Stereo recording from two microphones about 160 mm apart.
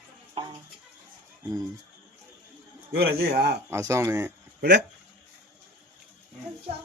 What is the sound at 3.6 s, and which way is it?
Speech, 20° right (ahead or behind).